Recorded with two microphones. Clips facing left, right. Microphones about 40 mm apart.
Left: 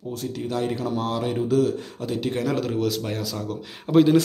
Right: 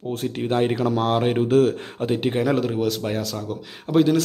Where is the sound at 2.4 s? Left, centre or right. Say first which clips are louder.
Right 3 dB; centre.